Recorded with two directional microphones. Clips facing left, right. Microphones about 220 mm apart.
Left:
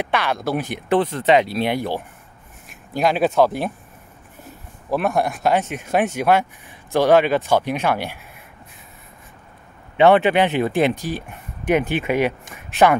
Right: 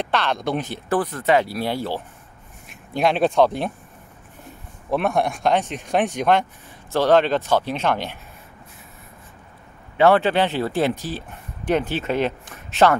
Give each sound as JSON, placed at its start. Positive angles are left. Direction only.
{"t": 0.0, "sound": "speech", "side_deg": 10}
{"t": 0.7, "sound": "speech", "side_deg": 20}
{"t": 3.0, "sound": "speech", "side_deg": 5}
{"t": 4.9, "sound": "speech", "side_deg": 0}
{"t": 9.9, "sound": "speech", "side_deg": 20}